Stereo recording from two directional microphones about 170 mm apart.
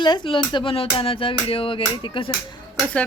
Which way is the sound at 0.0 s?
25° left (ahead or behind).